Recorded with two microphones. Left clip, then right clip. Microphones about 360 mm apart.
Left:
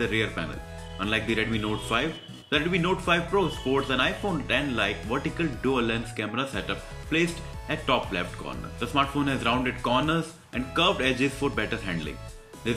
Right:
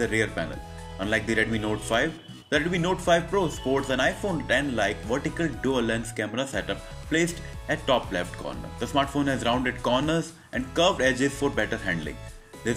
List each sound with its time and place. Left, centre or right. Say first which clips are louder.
0.0 s speech: right 1 dB; centre